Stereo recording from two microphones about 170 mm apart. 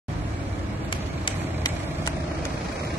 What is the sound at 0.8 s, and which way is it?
Vehicle, 30° left (ahead or behind).